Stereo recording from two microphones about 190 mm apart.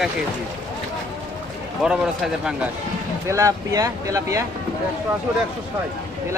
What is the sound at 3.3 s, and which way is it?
Speech, 15° right (ahead or behind).